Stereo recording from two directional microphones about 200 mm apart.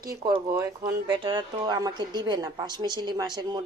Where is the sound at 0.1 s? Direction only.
20° right (ahead or behind).